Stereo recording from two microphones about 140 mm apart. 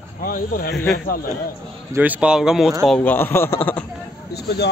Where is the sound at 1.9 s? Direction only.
10° right (ahead or behind).